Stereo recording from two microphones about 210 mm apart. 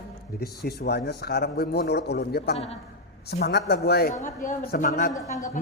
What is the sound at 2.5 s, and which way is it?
Speech, 30° left (ahead or behind).